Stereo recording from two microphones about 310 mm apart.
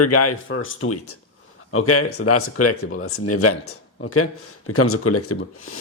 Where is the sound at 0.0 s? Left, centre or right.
Left.